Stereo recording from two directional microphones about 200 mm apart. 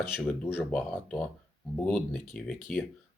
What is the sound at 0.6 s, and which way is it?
Speech, 5° left (ahead or behind).